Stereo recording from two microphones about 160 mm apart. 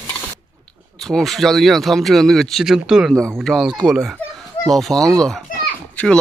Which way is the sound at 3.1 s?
15° right (ahead or behind).